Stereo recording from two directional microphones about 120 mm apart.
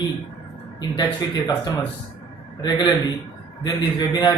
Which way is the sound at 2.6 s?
35° left (ahead or behind).